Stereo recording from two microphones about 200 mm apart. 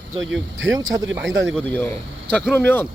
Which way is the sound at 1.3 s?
70° right (ahead or behind).